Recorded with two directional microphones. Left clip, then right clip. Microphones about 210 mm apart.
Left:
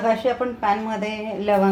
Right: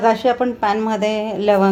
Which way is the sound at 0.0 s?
45° right (ahead or behind).